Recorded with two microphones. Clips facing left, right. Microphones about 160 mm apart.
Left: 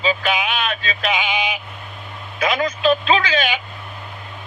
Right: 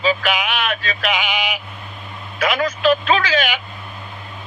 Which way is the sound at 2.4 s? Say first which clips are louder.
Even; 25° left (ahead or behind).